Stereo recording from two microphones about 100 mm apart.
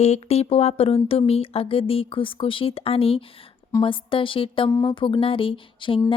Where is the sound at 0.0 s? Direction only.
90° left.